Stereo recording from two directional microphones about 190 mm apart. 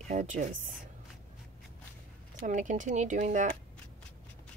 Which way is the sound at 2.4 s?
40° right (ahead or behind).